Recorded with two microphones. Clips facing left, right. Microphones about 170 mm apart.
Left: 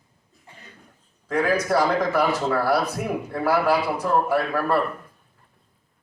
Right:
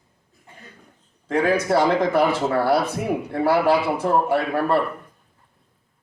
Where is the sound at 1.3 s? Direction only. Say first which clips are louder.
Right 2 dB; 25° right (ahead or behind).